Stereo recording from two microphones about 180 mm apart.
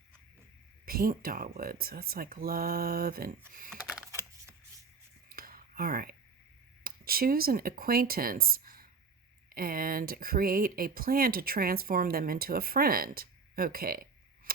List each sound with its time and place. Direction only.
0.9 s speech: 55° right (ahead or behind)
3.7 s computer keyboard: 5° right (ahead or behind)
5.3 s a sound: 55° right (ahead or behind)
6.8 s speech: 55° right (ahead or behind)